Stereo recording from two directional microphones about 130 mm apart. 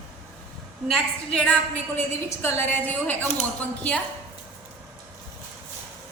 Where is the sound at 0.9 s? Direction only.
5° left (ahead or behind).